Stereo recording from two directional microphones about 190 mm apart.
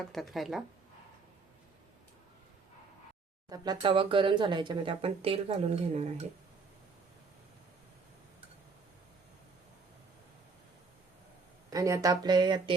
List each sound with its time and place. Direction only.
0.0 s speech: centre (ahead or behind)
3.5 s speech: 20° right (ahead or behind)
11.7 s speech: 15° right (ahead or behind)